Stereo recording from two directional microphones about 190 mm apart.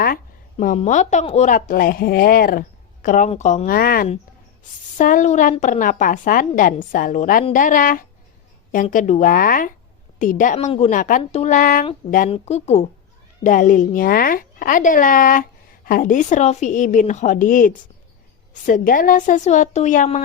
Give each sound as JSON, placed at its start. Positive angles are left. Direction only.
{"t": 0.6, "sound": "a woman's voice", "side_deg": 40}